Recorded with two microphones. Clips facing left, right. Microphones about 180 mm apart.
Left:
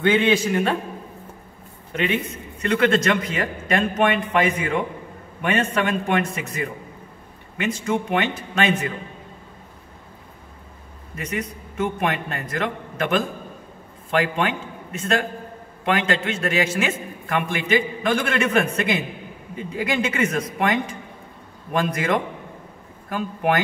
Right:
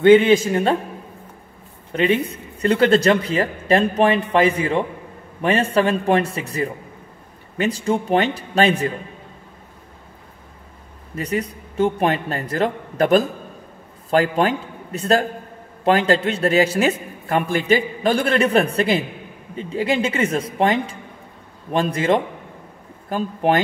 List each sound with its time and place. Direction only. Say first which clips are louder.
0.5 s a man's voice: right 3 dB; 30° right (ahead or behind)
1.9 s a man's voice: right 5 dB; 30° right (ahead or behind)
11.1 s a man's voice: right 5 dB; 35° right (ahead or behind)